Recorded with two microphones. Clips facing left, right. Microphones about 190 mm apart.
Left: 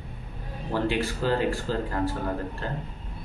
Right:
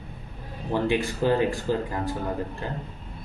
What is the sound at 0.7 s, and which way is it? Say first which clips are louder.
Speech: right 2 dB; 15° right (ahead or behind).